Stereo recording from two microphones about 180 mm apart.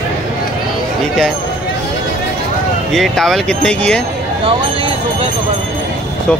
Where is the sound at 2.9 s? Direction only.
Centre (ahead or behind).